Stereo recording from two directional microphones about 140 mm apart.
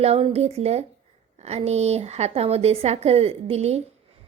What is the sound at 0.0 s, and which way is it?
Speech, 45° right (ahead or behind).